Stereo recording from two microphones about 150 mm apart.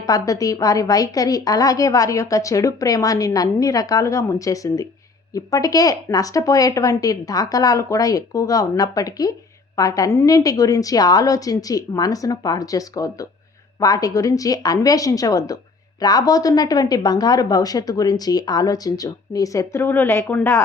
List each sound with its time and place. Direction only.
0.0 s a woman's voice: 25° left (ahead or behind)